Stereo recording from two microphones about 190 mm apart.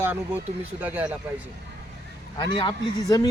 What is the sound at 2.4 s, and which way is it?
Speech, 25° left (ahead or behind).